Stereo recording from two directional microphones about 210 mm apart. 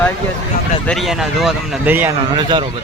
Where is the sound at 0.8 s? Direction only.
Centre (ahead or behind).